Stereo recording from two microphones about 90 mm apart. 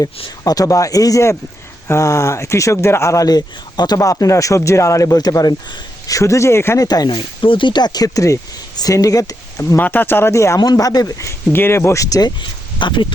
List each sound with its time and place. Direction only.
0.4 s a man's voice: 40° left (ahead or behind)
6.8 s speech: 45° left (ahead or behind)
7.1 s speech: 70° left (ahead or behind); by 9.7 s 35° left (ahead or behind)
9.7 s speech: 20° left (ahead or behind)
10.6 s a man's voice: 45° left (ahead or behind)
12.8 s speech: 65° left (ahead or behind)